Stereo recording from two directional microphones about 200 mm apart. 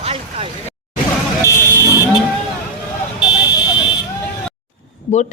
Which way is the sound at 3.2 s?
20° left (ahead or behind).